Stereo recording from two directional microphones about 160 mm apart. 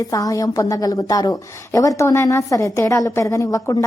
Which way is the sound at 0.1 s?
20° left (ahead or behind).